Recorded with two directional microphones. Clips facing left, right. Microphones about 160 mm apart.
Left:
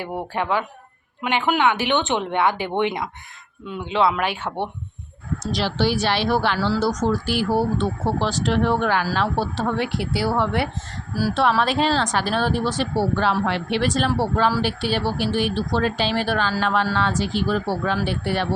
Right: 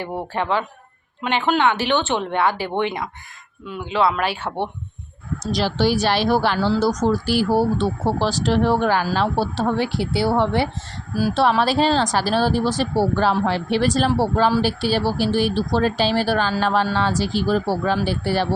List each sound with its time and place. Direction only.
0.0 s speech: 10° left (ahead or behind)
5.5 s speech: 40° right (ahead or behind)
11.1 s speech: 20° right (ahead or behind)
11.6 s speech: 35° right (ahead or behind)